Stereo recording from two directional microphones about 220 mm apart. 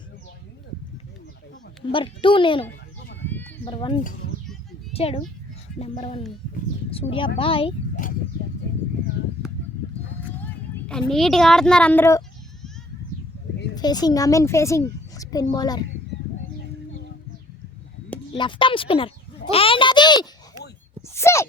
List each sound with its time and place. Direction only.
1.9 s speech: 20° left (ahead or behind)
3.2 s sheep: 10° left (ahead or behind)
3.6 s speech: 20° left (ahead or behind)
10.8 s a woman's voice: centre (ahead or behind)
13.7 s a child's voice: 20° left (ahead or behind)
18.3 s speech: 20° left (ahead or behind)
19.5 s a sound: 25° left (ahead or behind)